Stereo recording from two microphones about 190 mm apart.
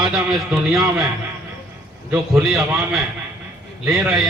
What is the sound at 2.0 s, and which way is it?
A man's voice, 5° right (ahead or behind).